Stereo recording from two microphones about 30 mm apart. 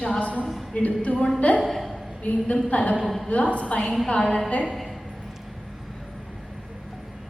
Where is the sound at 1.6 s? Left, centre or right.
Centre.